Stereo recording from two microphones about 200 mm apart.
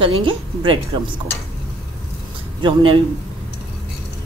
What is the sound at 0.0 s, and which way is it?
A woman's voice, 25° right (ahead or behind).